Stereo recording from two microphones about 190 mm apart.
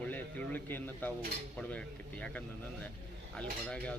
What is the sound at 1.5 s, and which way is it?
Cutlery, 5° left (ahead or behind).